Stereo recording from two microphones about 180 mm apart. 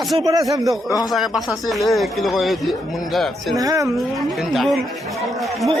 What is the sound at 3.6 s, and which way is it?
Speech, 20° right (ahead or behind).